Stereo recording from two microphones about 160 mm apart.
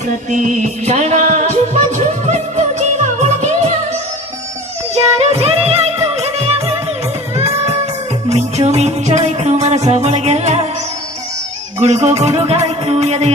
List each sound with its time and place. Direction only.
0.3 s music: 50° right (ahead or behind)
5.3 s music: 40° right (ahead or behind)
11.8 s music: 40° right (ahead or behind)